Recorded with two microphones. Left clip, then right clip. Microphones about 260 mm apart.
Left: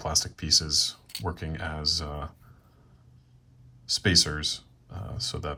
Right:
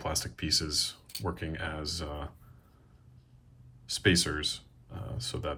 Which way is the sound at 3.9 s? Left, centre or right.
Left.